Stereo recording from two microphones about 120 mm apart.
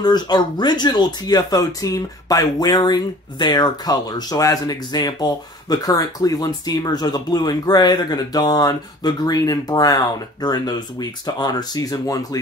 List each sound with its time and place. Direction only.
0.0 s speech: 35° left (ahead or behind)